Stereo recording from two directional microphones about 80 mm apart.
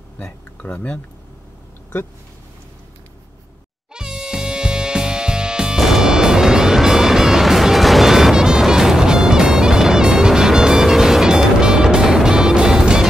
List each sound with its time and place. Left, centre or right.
0.2 s speech: left
3.9 s music: centre